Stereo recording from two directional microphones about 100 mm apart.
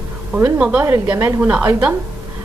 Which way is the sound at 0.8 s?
30° right (ahead or behind).